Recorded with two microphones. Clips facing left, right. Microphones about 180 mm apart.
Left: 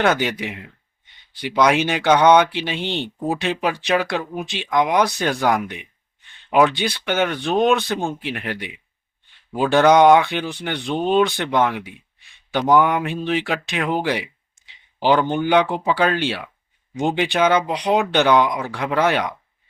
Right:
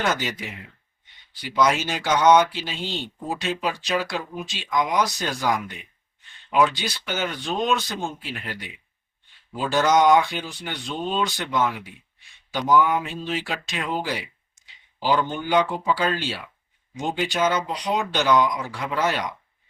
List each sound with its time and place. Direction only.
0.0 s speech: 60° left (ahead or behind)